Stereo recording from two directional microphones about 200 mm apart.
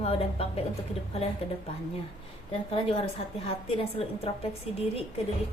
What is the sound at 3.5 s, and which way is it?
A woman's voice, 30° left (ahead or behind).